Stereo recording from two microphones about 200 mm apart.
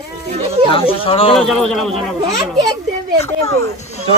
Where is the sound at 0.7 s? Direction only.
25° left (ahead or behind).